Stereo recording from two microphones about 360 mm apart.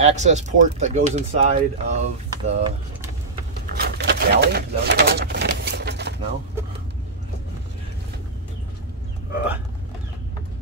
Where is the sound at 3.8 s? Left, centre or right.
Right.